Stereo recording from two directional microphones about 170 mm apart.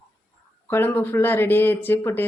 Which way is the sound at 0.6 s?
10° left (ahead or behind).